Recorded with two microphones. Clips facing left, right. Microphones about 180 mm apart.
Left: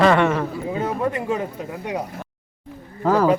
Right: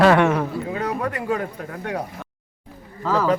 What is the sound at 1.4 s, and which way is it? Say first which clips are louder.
Speech: left 1 dB; 10° left (ahead or behind).